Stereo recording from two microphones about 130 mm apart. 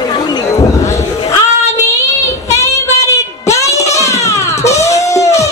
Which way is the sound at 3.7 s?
25° left (ahead or behind).